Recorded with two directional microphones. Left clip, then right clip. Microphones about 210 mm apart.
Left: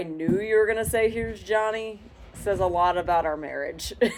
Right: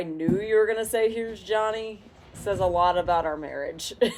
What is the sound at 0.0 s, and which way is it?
Speech, 20° left (ahead or behind).